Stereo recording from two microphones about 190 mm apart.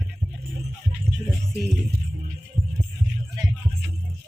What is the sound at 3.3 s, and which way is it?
Music, 15° right (ahead or behind).